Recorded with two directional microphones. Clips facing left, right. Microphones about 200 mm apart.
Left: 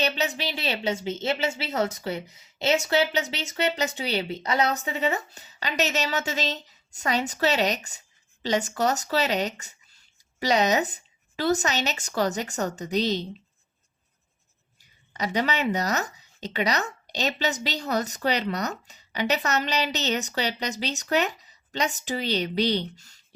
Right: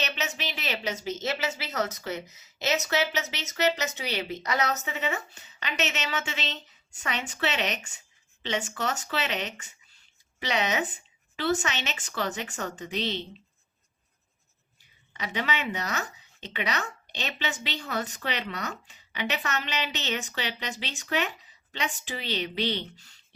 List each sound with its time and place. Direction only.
0.0 s a woman's voice: 35° left (ahead or behind)
15.1 s a woman's voice: 40° left (ahead or behind)